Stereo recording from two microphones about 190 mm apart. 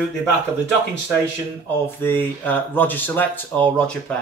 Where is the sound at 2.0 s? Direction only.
10° left (ahead or behind).